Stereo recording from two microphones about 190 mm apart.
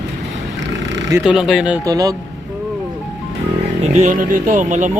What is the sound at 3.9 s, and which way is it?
Speech, 40° right (ahead or behind).